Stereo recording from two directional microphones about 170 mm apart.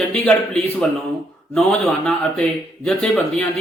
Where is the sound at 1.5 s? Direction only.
5° left (ahead or behind).